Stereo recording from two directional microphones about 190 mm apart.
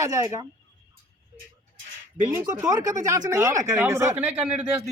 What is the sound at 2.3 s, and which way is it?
Speech, 15° right (ahead or behind).